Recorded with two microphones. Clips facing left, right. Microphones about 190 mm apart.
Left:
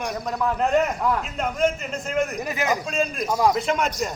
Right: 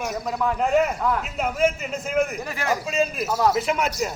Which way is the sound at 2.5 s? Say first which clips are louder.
Left 3 dB; 15° left (ahead or behind).